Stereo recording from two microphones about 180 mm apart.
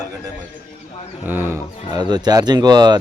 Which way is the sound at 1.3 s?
15° right (ahead or behind).